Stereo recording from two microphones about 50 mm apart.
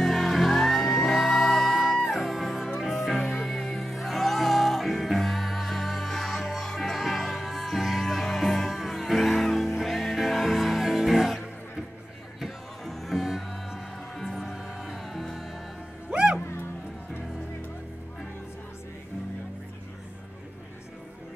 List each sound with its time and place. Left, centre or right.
0.0 s music: centre
16.1 s music: centre